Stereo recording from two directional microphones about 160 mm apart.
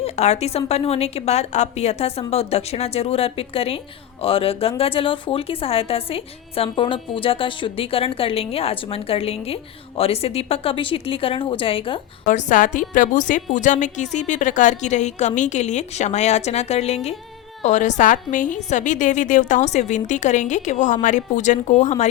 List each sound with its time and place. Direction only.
0.0 s a woman's voice: 40° left (ahead or behind)
12.3 s a woman's voice: 50° left (ahead or behind)